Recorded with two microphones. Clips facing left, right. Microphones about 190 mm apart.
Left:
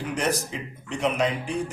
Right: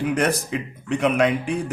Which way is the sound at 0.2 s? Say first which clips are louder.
Right 4 dB; 60° right (ahead or behind).